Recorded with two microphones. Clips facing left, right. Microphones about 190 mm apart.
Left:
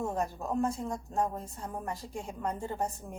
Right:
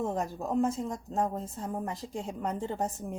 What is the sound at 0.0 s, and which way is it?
Speech, 20° right (ahead or behind).